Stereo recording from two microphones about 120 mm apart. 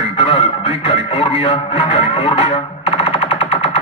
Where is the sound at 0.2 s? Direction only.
50° left (ahead or behind).